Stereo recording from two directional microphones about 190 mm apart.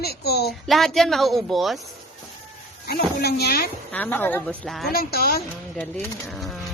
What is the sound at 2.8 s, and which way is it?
Speech, 55° left (ahead or behind).